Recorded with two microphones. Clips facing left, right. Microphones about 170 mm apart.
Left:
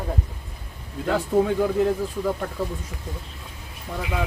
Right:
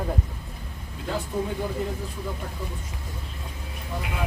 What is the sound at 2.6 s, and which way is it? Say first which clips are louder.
Speech: left 8 dB; 90° left.